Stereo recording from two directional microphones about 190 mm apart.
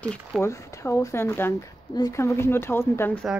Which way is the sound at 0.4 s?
15° left (ahead or behind).